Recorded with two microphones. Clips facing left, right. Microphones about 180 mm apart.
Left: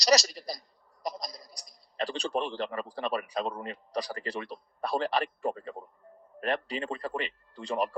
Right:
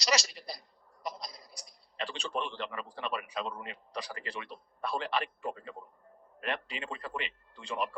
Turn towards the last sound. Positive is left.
turn(degrees=40)  # may be behind; listen again after turning